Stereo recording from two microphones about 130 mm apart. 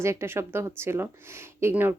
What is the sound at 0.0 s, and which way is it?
A woman's voice, 20° right (ahead or behind).